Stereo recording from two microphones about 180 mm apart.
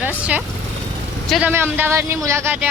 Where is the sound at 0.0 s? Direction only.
10° right (ahead or behind).